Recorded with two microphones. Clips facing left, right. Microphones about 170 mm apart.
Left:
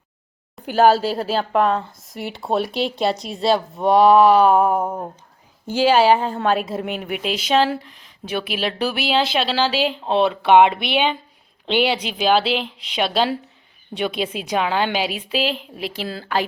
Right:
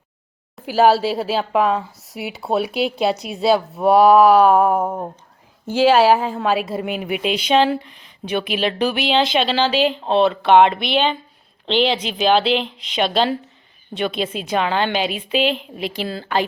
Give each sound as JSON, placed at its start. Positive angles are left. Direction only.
{"t": 0.5, "sound": "a woman's voice", "side_deg": 0}
{"t": 1.9, "sound": "a sound", "side_deg": -75}
{"t": 2.1, "sound": "a woman's voice", "side_deg": -5}